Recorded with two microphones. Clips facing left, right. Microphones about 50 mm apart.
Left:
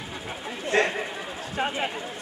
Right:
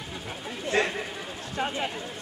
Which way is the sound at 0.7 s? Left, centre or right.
Centre.